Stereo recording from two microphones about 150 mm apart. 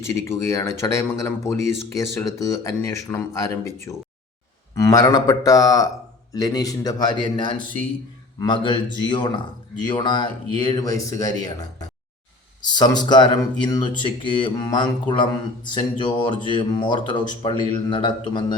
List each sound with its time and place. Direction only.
0.0 s speech: 20° left (ahead or behind)
12.6 s speech: 30° left (ahead or behind)